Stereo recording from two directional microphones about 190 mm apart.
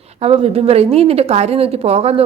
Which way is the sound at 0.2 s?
30° right (ahead or behind).